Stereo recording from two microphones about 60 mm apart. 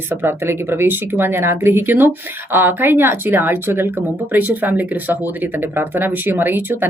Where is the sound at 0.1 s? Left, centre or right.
Right.